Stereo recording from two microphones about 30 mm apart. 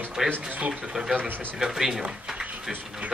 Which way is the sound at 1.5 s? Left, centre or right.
Centre.